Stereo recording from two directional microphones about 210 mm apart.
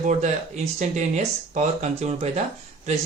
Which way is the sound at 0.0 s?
35° right (ahead or behind).